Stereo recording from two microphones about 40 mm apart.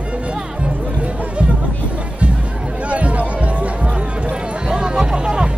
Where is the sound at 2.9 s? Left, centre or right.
Right.